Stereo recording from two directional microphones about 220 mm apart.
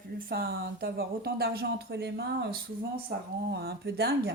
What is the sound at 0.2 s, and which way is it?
Speech, 40° right (ahead or behind).